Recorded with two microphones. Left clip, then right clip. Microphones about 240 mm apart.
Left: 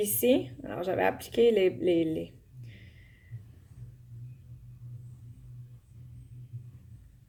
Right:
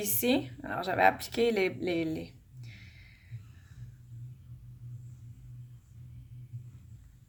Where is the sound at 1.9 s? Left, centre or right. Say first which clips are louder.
Left 5 dB; right.